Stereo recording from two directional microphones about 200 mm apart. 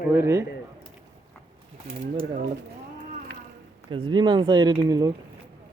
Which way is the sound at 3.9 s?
25° right (ahead or behind).